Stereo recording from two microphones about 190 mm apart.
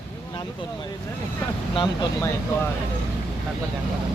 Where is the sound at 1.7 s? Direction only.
25° left (ahead or behind).